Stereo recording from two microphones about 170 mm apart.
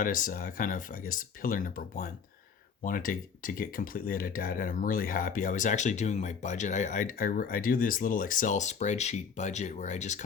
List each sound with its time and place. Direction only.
0.0 s speech: 55° left (ahead or behind)